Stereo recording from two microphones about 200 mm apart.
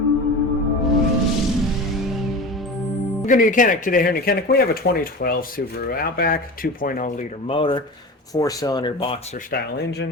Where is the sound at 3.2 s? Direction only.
40° left (ahead or behind).